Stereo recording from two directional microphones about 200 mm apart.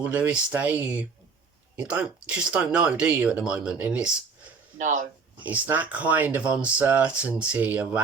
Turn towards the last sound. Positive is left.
turn(degrees=-5)  # may be behind; listen again after turning